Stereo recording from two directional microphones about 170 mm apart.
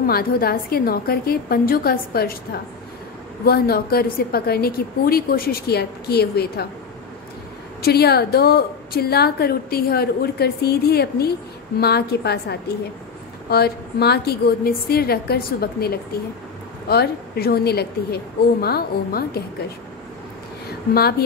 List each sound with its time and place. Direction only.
0.0 s a woman's voice: 60° left (ahead or behind)
7.8 s a woman's voice: 70° left (ahead or behind)